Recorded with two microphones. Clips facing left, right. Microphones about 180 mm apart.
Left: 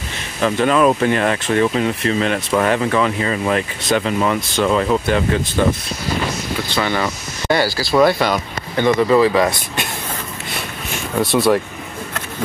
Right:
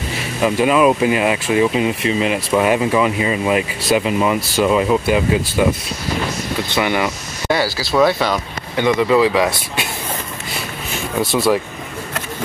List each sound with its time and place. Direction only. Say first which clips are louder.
0.4 s speech: right 1 dB; 10° right (ahead or behind)
6.7 s speech: right 2 dB; 15° right (ahead or behind)
7.4 s speech: left 1 dB; 5° right (ahead or behind)
8.7 s speech: left 1 dB; 10° right (ahead or behind)
11.1 s speech: left 1 dB; centre (ahead or behind)